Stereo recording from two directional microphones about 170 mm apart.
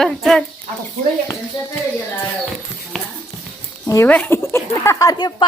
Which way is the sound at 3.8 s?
15° left (ahead or behind).